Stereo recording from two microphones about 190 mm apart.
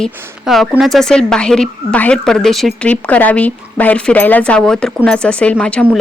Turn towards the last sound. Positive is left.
turn(degrees=5)  # may be behind; listen again after turning